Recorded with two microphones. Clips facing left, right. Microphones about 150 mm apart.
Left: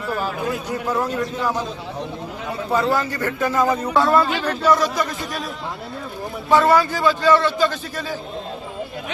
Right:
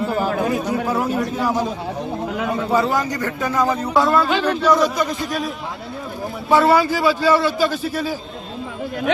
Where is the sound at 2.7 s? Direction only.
15° right (ahead or behind).